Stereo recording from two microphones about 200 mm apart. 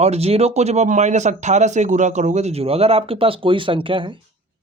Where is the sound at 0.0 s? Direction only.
30° right (ahead or behind).